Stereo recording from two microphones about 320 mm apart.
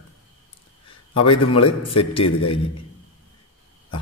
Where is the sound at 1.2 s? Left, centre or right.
Centre.